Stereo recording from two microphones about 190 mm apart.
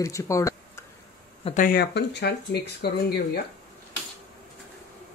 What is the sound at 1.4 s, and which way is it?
Speech, 40° left (ahead or behind).